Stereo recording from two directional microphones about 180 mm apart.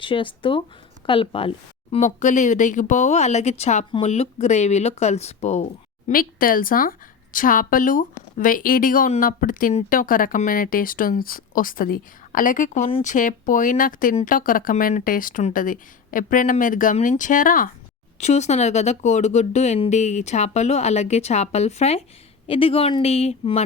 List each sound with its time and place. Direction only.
0.0 s a woman's voice: 30° left (ahead or behind)
2.0 s speech: 45° left (ahead or behind)
6.1 s speech: 50° left (ahead or behind)
18.2 s speech: 40° left (ahead or behind)